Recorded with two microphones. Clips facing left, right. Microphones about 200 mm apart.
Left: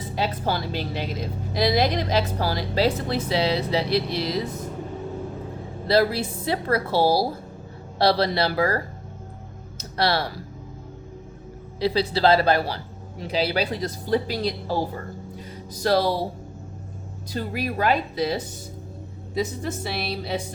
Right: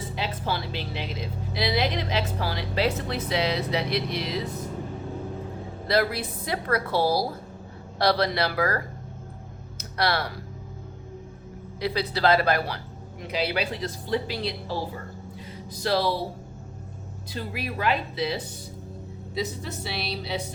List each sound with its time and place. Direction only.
0.2 s a woman's voice: 40° left (ahead or behind)
5.9 s a woman's voice: 30° left (ahead or behind)
11.8 s a woman's voice: 30° left (ahead or behind)
17.3 s a woman's voice: 40° left (ahead or behind)